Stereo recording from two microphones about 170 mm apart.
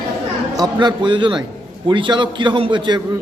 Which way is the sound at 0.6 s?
25° right (ahead or behind).